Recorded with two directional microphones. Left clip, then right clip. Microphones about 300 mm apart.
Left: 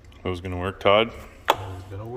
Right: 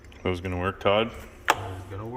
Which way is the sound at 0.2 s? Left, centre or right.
Centre.